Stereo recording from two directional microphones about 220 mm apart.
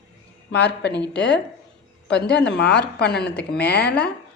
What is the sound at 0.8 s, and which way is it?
A woman's voice, 50° left (ahead or behind).